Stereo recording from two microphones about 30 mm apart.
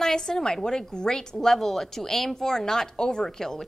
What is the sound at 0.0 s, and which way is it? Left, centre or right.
A woman's voice, centre.